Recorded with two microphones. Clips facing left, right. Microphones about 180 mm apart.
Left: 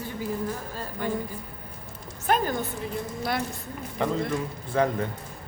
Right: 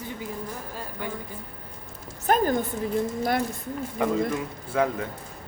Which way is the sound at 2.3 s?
40° right (ahead or behind).